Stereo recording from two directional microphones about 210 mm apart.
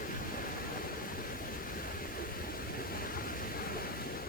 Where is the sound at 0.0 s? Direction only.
40° left (ahead or behind).